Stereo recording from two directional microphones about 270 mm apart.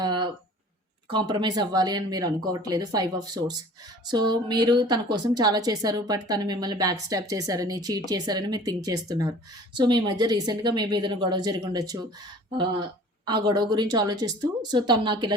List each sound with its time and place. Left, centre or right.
0.0 s a sound: centre
1.1 s a woman's voice: centre
13.2 s a woman's voice: centre